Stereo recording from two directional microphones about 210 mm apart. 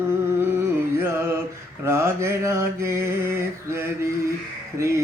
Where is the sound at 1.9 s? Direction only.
10° right (ahead or behind).